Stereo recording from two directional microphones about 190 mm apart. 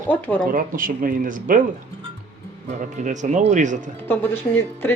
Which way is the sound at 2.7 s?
40° right (ahead or behind).